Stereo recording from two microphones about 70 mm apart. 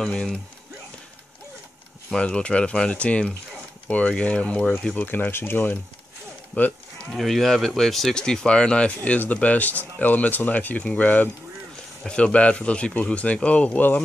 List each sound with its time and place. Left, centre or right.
0.0 s speech: centre
2.0 s speech: centre
7.1 s speech: centre; by 13.9 s left